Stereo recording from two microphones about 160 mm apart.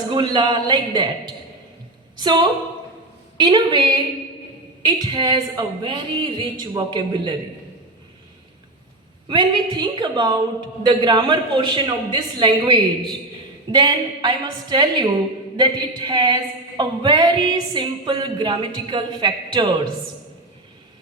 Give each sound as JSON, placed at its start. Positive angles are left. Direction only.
{"t": 0.1, "sound": "a woman's voice", "side_deg": -30}
{"t": 9.3, "sound": "a woman's voice", "side_deg": -30}